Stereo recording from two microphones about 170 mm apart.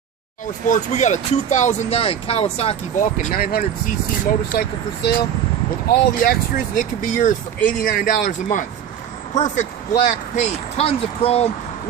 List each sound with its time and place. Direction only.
0.7 s speech: 45° left (ahead or behind); by 5.2 s 70° left (ahead or behind)
5.9 s speech: 60° left (ahead or behind); by 11.5 s 35° left (ahead or behind)